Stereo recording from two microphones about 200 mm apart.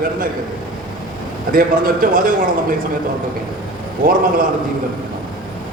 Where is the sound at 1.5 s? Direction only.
45° right (ahead or behind).